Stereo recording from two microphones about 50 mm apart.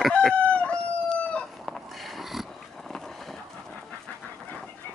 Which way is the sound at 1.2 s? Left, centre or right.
Left.